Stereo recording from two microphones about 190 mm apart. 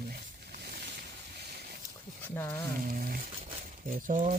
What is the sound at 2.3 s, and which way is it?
Speech, 15° left (ahead or behind).